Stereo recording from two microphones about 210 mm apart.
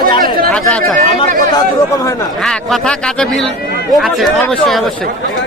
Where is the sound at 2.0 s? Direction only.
15° left (ahead or behind).